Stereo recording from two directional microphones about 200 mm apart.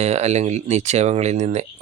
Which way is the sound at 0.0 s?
35° right (ahead or behind).